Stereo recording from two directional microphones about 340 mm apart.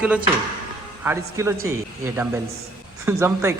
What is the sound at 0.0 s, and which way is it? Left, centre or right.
Speech, centre.